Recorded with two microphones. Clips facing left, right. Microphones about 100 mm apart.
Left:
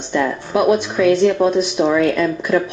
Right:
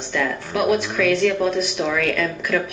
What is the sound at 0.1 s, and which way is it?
Speech, 25° left (ahead or behind).